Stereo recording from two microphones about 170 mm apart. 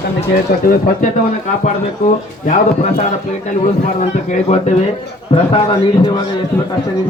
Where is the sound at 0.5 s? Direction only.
60° left (ahead or behind).